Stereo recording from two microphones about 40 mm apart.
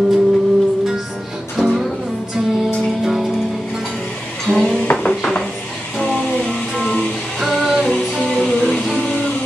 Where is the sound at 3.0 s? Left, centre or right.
Centre.